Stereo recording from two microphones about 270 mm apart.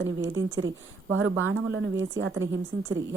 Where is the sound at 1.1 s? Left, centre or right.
Right.